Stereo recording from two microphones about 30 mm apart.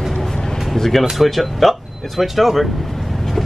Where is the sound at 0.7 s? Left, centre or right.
Centre.